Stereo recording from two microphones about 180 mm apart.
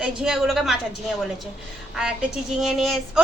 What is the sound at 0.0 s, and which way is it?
Speech, 5° right (ahead or behind).